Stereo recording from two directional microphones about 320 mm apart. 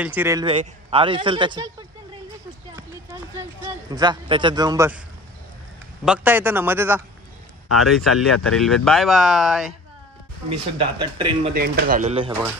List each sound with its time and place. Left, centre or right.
0.0 s speech: centre
2.7 s a sound: centre
3.9 s speech: centre
6.0 s speech: centre
10.8 s speech: centre
11.5 s speech: right